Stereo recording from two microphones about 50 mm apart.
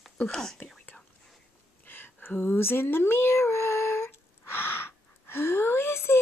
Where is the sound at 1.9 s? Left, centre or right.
Left.